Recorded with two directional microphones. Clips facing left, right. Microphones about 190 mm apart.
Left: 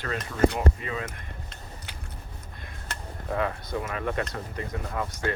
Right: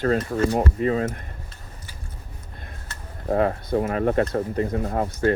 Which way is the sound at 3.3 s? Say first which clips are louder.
Right 8 dB; 45° right (ahead or behind).